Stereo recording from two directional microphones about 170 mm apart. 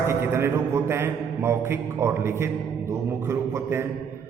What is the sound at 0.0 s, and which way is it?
A man's voice, 15° right (ahead or behind).